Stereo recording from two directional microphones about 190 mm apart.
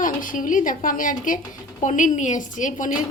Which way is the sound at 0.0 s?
45° left (ahead or behind).